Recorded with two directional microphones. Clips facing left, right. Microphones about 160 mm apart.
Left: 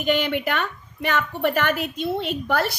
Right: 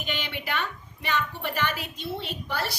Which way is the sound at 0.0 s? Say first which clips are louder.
Left 12 dB; 50° left (ahead or behind).